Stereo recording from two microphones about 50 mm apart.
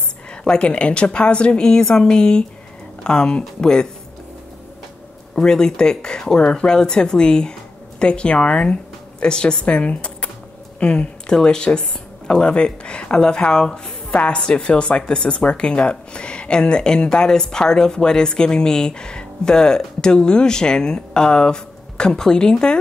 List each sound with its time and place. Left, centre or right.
0.3 s a woman's voice: left
5.3 s a woman's voice: centre